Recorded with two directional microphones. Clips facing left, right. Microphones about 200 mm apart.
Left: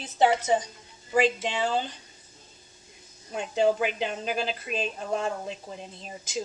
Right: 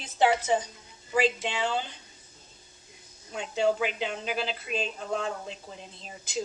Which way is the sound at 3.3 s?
50° left (ahead or behind).